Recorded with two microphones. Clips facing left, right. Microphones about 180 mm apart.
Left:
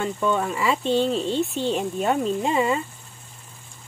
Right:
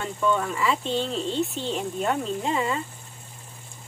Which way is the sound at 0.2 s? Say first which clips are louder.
Right 1 dB; 15° left (ahead or behind).